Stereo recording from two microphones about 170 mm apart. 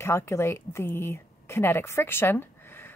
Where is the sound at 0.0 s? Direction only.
15° left (ahead or behind).